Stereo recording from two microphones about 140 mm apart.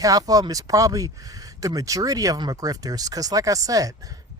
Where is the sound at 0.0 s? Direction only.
25° right (ahead or behind).